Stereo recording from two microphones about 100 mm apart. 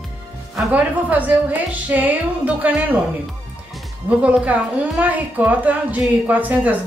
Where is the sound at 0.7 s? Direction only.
15° right (ahead or behind).